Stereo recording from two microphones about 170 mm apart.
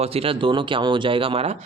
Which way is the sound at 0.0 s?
35° right (ahead or behind).